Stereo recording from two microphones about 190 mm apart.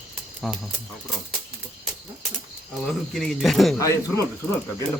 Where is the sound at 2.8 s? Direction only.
Centre (ahead or behind).